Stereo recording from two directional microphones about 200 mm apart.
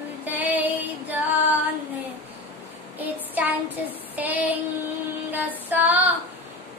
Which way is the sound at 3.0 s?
10° right (ahead or behind).